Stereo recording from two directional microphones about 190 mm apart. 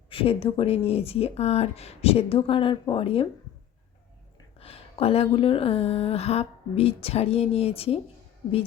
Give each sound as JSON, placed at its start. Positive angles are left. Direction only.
{"t": 0.1, "sound": "speech", "side_deg": 30}
{"t": 4.6, "sound": "speech", "side_deg": 30}